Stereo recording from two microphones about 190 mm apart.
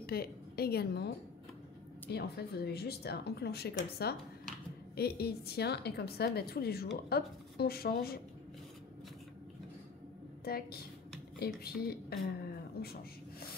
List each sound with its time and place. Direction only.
0.0 s a woman's voice: 55° left (ahead or behind)
10.4 s a woman's voice: 55° left (ahead or behind)